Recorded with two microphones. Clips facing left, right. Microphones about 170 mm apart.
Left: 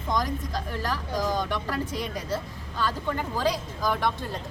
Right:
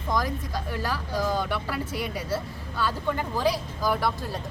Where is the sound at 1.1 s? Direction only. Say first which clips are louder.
Right 1 dB; 15° left (ahead or behind).